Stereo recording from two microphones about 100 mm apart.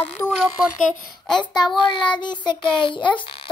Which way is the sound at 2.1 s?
50° left (ahead or behind).